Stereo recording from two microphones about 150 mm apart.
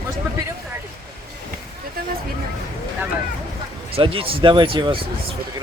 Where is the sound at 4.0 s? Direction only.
35° right (ahead or behind).